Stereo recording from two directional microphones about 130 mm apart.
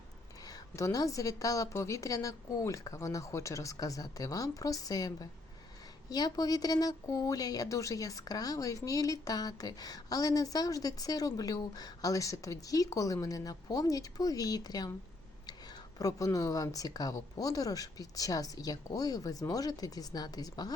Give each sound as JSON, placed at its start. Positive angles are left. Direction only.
{"t": 0.4, "sound": "speech", "side_deg": 25}
{"t": 16.0, "sound": "speech", "side_deg": 25}